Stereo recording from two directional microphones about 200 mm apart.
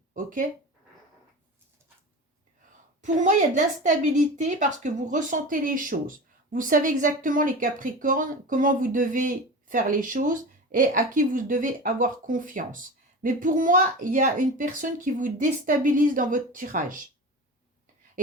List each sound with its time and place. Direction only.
0.1 s speech: 40° right (ahead or behind)
3.0 s a woman's voice: 40° right (ahead or behind)